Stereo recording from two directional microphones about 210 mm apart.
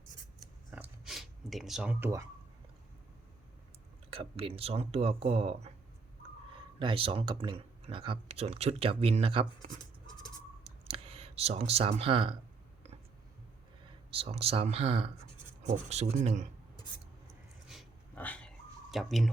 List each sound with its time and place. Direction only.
0.7 s a sound: 5° right (ahead or behind)
4.1 s speech: 25° right (ahead or behind)
6.7 s speech: 25° right (ahead or behind)
10.6 s clicking: 25° right (ahead or behind)
14.1 s speech: 25° right (ahead or behind)
17.7 s a sound: 5° left (ahead or behind)